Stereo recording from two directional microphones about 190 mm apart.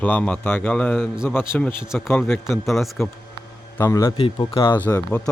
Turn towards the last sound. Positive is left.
turn(degrees=15)  # may be behind; listen again after turning